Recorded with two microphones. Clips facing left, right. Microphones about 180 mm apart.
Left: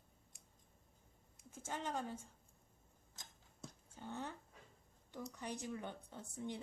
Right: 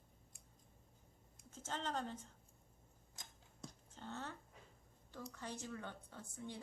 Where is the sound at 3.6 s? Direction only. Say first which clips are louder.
Left 1 dB; 10° left (ahead or behind).